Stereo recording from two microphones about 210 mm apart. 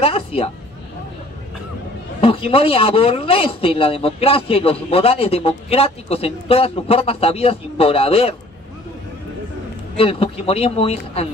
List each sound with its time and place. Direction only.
0.0 s a man's voice: 25° left (ahead or behind)
2.1 s a man's voice: 25° left (ahead or behind)
9.9 s a man's voice: 25° left (ahead or behind)